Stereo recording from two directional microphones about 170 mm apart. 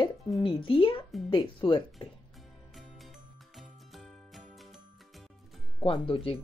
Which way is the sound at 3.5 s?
Centre (ahead or behind).